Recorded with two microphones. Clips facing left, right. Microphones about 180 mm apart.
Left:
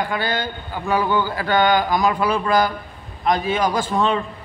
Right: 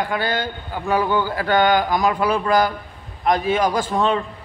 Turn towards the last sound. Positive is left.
turn(degrees=-50)  # may be behind; listen again after turning